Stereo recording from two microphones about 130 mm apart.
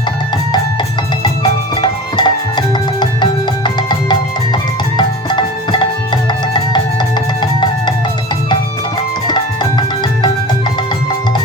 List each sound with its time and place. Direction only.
1.7 s music: 35° left (ahead or behind)
9.2 s music: 35° left (ahead or behind)